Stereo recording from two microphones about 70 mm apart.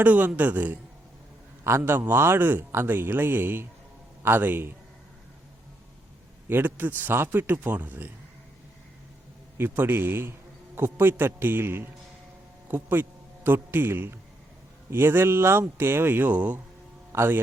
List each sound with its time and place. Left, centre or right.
0.0 s speech: right
1.6 s speech: right
6.5 s speech: right
9.6 s a man's voice: right
17.1 s a man's voice: right